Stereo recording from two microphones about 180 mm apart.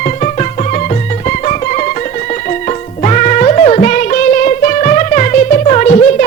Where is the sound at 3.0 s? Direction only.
40° left (ahead or behind).